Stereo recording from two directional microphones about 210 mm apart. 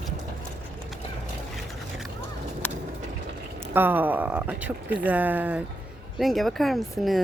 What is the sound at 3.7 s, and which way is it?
Speech, 10° right (ahead or behind).